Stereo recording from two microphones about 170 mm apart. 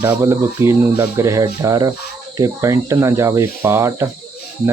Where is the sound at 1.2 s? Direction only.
20° right (ahead or behind).